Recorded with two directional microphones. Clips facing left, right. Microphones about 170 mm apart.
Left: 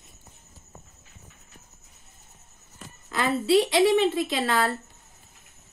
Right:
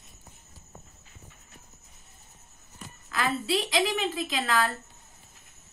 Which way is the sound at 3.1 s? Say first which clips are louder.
Left 7 dB; 25° left (ahead or behind).